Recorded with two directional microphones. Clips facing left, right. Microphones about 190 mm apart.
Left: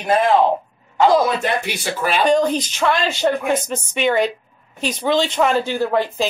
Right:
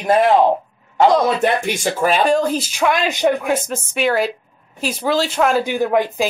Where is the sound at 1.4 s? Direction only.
50° right (ahead or behind).